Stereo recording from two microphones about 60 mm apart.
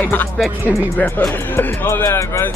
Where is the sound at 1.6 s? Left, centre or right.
Left.